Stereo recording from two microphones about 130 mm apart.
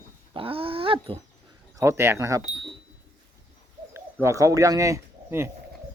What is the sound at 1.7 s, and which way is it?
Speech, 20° right (ahead or behind).